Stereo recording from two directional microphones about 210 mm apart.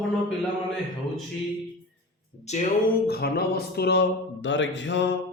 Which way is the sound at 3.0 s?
50° left (ahead or behind).